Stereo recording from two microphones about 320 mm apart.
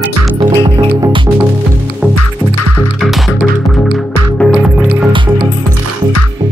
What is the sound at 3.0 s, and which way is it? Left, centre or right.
Music, centre.